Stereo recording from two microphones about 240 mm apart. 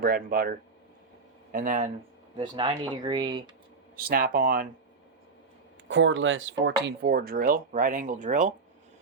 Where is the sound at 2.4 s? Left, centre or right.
Centre.